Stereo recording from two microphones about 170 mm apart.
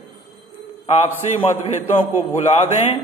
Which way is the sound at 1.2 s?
40° left (ahead or behind).